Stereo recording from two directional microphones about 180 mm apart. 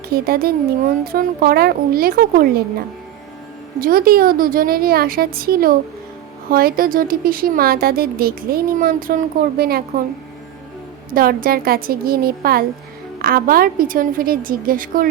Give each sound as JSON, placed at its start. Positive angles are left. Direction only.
{"t": 0.1, "sound": "speech", "side_deg": -55}
{"t": 3.8, "sound": "a woman's voice", "side_deg": -55}
{"t": 11.1, "sound": "a woman's voice", "side_deg": -55}